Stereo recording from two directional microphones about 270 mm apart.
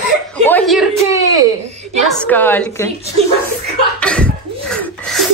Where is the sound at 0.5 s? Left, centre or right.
Centre.